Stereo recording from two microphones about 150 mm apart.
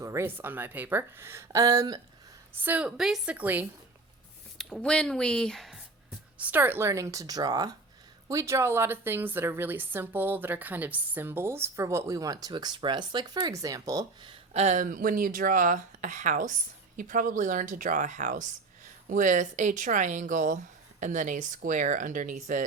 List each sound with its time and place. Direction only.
0.0 s a woman's voice: 20° right (ahead or behind)
2.5 s a woman's voice: 15° right (ahead or behind)
4.5 s speech: 5° left (ahead or behind)
6.4 s a woman's voice: 10° right (ahead or behind); by 14.3 s 30° right (ahead or behind)
14.5 s speech: 50° right (ahead or behind)